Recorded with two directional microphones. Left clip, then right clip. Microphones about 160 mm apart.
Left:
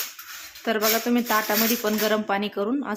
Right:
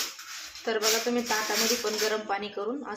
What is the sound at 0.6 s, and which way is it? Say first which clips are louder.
Speech: left 4 dB; 85° left.